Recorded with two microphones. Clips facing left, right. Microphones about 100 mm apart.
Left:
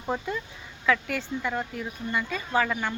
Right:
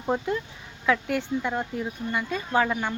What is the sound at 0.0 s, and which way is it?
Speech, 10° right (ahead or behind).